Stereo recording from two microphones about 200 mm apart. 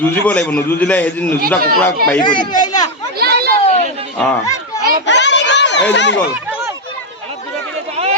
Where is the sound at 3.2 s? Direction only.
50° right (ahead or behind).